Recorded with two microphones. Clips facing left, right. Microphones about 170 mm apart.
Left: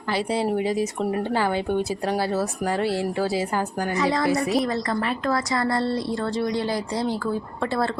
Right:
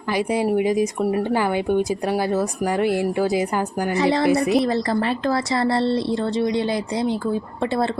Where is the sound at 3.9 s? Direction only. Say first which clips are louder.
Right 4 dB; 30° right (ahead or behind).